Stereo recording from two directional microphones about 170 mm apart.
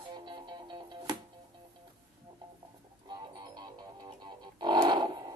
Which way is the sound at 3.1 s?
25° right (ahead or behind).